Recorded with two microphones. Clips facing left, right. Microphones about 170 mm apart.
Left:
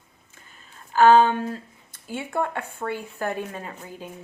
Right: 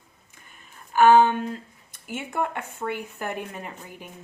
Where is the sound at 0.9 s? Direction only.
15° right (ahead or behind).